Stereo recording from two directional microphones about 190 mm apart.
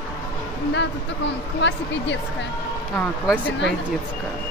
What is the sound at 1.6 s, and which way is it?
Speech, 70° left (ahead or behind).